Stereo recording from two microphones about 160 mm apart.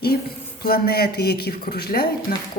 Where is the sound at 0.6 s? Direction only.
75° left (ahead or behind).